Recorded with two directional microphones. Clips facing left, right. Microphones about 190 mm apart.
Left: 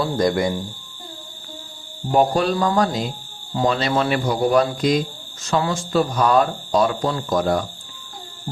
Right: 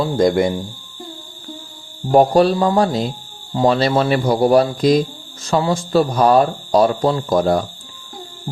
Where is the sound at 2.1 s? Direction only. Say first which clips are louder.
Right 5 dB; 40° right (ahead or behind).